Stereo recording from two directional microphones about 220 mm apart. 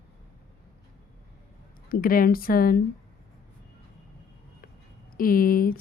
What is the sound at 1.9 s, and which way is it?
Speech, 40° left (ahead or behind).